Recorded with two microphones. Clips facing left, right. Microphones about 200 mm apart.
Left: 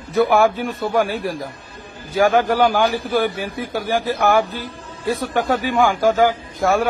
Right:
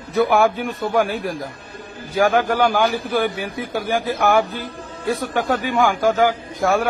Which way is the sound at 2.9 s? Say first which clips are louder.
Left 1 dB; centre (ahead or behind).